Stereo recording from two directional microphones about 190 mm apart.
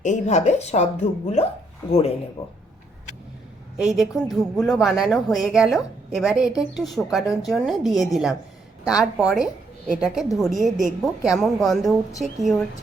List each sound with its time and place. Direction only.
0.0 s speech: 40° left (ahead or behind)
1.9 s speech: 30° left (ahead or behind)
3.8 s a woman's voice: 5° right (ahead or behind)